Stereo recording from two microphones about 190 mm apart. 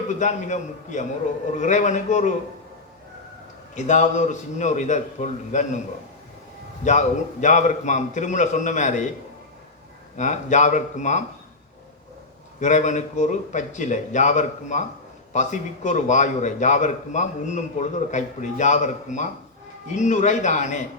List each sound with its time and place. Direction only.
0.1 s a man's voice: 40° left (ahead or behind)
3.8 s a man's voice: 40° left (ahead or behind)
6.8 s a man's voice: 40° left (ahead or behind)
10.2 s a man's voice: 40° left (ahead or behind)
12.5 s a man's voice: 40° left (ahead or behind)